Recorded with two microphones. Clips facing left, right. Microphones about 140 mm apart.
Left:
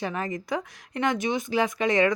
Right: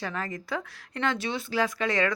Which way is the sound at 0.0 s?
20° left (ahead or behind).